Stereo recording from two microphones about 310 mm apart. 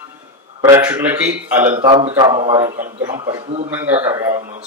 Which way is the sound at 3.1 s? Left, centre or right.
Centre.